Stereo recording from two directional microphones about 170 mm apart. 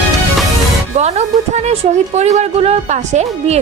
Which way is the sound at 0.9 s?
40° right (ahead or behind).